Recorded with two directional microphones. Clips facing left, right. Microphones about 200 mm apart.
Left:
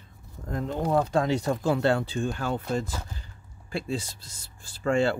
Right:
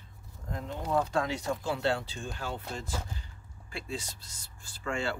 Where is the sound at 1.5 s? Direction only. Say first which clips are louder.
Left 6 dB; 55° left (ahead or behind).